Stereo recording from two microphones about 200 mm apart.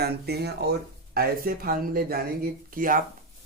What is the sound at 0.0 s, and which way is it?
Speech, 55° right (ahead or behind).